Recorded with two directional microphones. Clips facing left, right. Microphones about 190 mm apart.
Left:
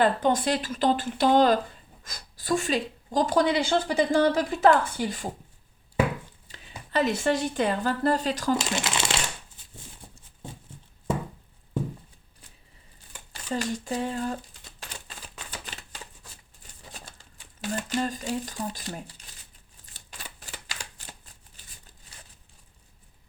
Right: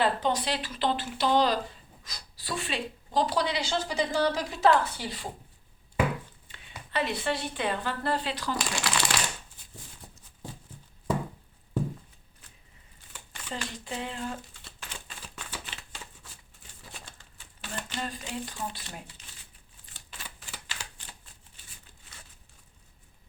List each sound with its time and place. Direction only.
0.0 s speech: 50° left (ahead or behind)
6.5 s a woman's voice: 40° left (ahead or behind)
8.7 s crumpling: 25° left (ahead or behind)
13.3 s speech: 40° left (ahead or behind)
15.6 s shuffling cards: 40° left (ahead or behind)
17.6 s speech: 40° left (ahead or behind)
19.8 s shuffling cards: 40° left (ahead or behind)